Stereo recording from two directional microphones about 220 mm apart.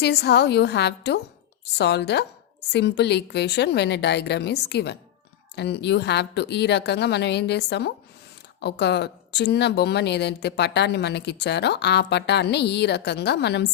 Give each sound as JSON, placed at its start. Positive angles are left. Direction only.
{"t": 0.0, "sound": "speech", "side_deg": 50}